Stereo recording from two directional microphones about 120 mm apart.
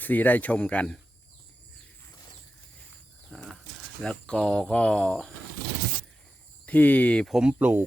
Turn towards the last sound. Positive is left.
turn(degrees=-15)  # may be behind; listen again after turning